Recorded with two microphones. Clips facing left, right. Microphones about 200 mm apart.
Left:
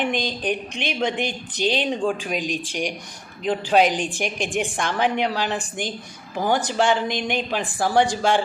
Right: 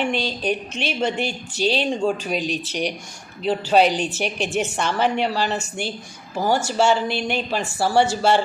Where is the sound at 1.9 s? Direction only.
45° right (ahead or behind).